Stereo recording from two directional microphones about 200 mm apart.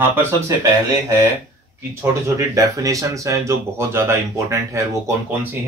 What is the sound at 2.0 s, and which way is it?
Speech, 15° right (ahead or behind).